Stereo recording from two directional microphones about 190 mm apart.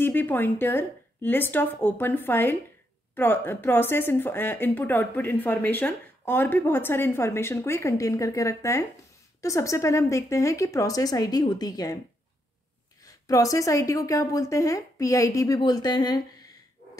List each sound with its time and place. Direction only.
0.0 s speech: 10° left (ahead or behind)
13.0 s speech: 20° left (ahead or behind)